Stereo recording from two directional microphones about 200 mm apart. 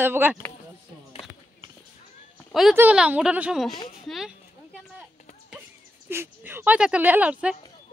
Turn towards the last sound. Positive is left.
turn(degrees=-5)  # may be behind; listen again after turning